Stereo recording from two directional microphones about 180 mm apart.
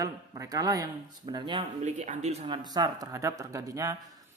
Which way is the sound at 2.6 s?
20° right (ahead or behind).